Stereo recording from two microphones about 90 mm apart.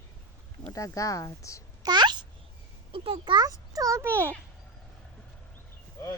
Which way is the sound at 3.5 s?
40° right (ahead or behind).